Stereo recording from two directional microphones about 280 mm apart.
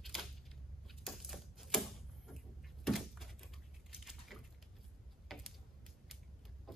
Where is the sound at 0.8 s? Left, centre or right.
Centre.